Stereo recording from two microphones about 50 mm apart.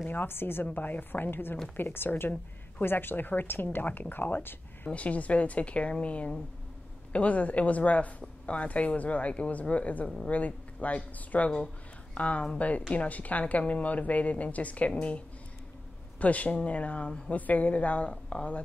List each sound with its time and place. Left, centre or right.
0.1 s speech: left
0.7 s speech: left
4.8 s speech: left
11.5 s speech: centre